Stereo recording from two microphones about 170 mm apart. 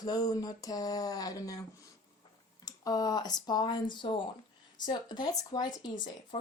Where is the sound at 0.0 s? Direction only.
25° left (ahead or behind).